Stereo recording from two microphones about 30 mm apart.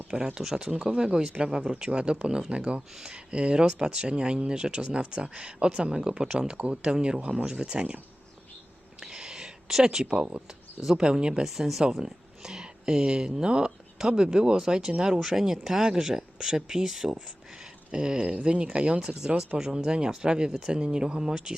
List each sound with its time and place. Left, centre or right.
0.3 s speech: right
0.7 s speech: right
0.9 s speech: right
1.7 s speech: right
6.6 s speech: right
9.0 s a sound: right
10.0 s speech: right
11.4 s speech: centre
11.9 s a sound: centre
13.4 s speech: right
18.9 s speech: right